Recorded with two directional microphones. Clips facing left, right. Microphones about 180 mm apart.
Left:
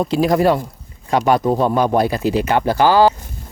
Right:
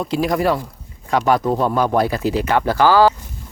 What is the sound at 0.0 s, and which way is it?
Speech, 30° left (ahead or behind).